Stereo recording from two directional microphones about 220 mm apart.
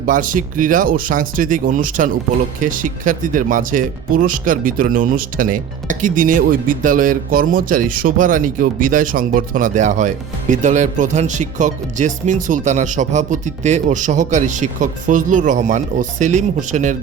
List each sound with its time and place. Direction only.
0.0 s speech: 40° right (ahead or behind)